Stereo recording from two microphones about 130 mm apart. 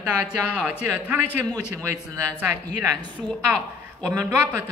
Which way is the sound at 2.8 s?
25° right (ahead or behind).